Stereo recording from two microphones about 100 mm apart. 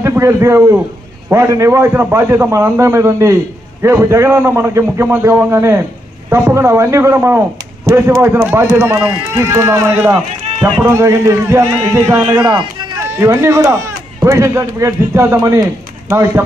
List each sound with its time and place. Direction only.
0.0 s a man's voice: 25° right (ahead or behind)
12.3 s speech: 50° right (ahead or behind)
13.0 s a man's voice: 25° right (ahead or behind)